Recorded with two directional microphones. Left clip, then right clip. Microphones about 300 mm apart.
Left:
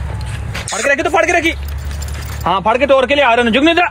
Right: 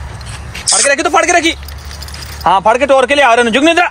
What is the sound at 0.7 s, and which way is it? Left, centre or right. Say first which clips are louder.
Speech: right 3 dB; right.